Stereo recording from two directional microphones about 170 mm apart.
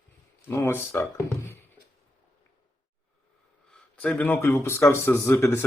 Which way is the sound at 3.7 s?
5° left (ahead or behind).